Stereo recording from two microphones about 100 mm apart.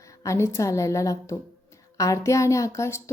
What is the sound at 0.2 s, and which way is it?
A woman's voice, 30° left (ahead or behind).